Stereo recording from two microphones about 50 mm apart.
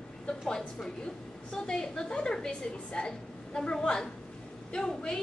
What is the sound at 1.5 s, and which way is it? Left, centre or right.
A woman's voice, centre.